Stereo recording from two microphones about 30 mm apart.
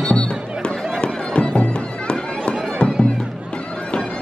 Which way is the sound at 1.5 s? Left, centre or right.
Left.